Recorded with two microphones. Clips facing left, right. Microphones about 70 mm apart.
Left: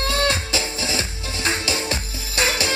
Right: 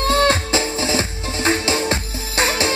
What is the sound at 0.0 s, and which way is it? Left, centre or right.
Music, right.